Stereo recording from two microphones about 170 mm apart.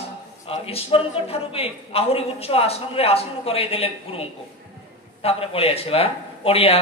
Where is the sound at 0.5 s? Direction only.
35° left (ahead or behind).